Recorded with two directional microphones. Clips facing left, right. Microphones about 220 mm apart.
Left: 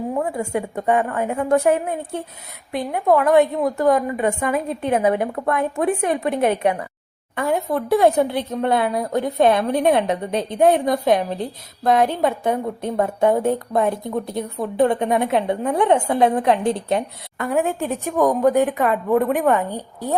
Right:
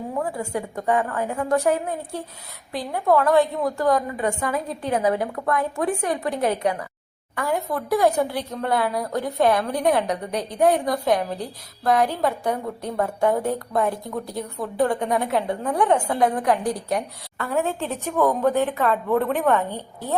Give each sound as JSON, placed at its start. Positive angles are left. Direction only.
{"t": 0.2, "sound": "speech", "side_deg": 25}